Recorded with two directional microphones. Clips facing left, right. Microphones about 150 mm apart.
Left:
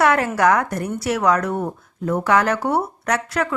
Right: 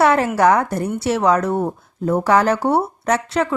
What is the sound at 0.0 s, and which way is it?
A woman's voice, 30° right (ahead or behind).